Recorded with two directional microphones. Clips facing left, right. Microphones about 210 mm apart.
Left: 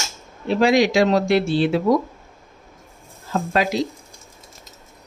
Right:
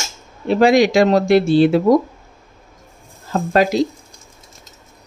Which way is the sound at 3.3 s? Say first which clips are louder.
Right 5 dB; 45° right (ahead or behind).